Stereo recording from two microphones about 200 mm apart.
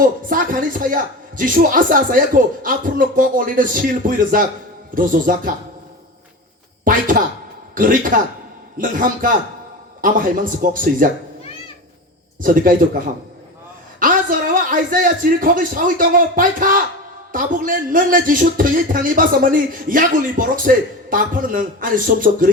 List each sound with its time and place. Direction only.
0.0 s a man's voice: 45° right (ahead or behind)
6.8 s a man's voice: 45° right (ahead or behind)
12.4 s a man's voice: 45° right (ahead or behind)
14.0 s a man's voice: 45° right (ahead or behind)